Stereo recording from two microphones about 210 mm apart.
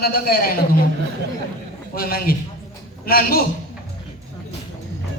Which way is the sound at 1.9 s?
45° left (ahead or behind).